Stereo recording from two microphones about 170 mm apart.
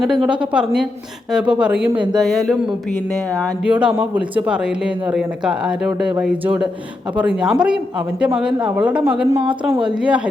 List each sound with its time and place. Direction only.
0.0 s speech: 5° right (ahead or behind)
3.6 s speech: 5° right (ahead or behind)
9.5 s a woman's voice: 30° right (ahead or behind)